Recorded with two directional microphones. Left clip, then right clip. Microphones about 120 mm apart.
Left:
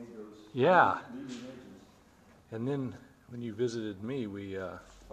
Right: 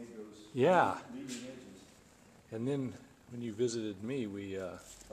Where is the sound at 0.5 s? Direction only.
5° right (ahead or behind).